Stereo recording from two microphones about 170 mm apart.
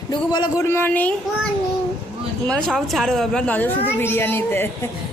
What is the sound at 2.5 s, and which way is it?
A woman's voice, 5° left (ahead or behind).